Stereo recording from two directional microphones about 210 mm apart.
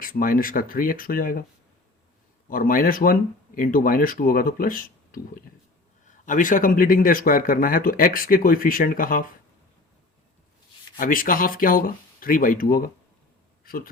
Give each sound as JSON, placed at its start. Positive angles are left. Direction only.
{"t": 0.0, "sound": "speech", "side_deg": 45}
{"t": 2.5, "sound": "speech", "side_deg": 40}
{"t": 10.9, "sound": "a man's voice", "side_deg": 40}